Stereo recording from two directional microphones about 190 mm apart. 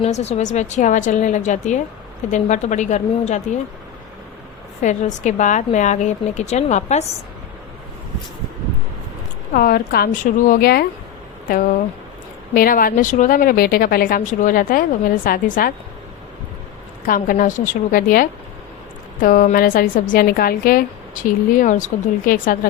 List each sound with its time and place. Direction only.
0.0 s a woman's voice: 35° left (ahead or behind)
4.8 s a woman's voice: 40° left (ahead or behind)
9.6 s a woman's voice: 50° left (ahead or behind)
12.5 s a woman's voice: 50° left (ahead or behind)
17.1 s a woman's voice: 45° left (ahead or behind)